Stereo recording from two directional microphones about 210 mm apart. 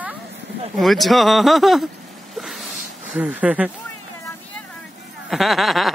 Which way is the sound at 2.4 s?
Centre (ahead or behind).